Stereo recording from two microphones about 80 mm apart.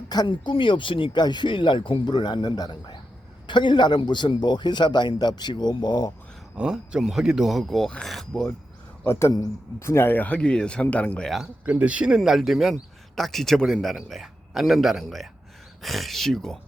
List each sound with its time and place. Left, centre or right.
0.1 s speech: left
3.4 s a man's voice: left
6.6 s speech: centre
9.0 s speech: left; by 11.2 s centre
11.6 s a man's voice: centre